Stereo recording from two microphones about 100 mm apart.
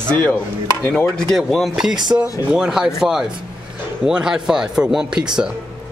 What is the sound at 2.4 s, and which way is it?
Speech, 5° right (ahead or behind).